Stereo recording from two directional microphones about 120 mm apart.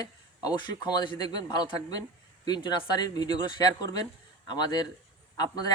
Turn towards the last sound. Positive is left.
turn(degrees=35)  # may be behind; listen again after turning